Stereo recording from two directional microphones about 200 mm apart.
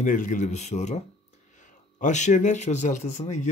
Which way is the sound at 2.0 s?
35° left (ahead or behind).